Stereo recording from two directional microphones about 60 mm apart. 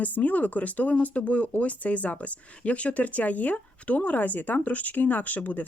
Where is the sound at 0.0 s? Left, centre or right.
Left.